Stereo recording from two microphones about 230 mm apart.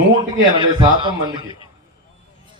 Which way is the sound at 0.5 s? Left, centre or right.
Right.